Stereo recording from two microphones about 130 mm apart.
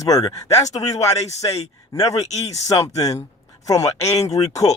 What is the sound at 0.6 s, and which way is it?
Speech, 60° left (ahead or behind).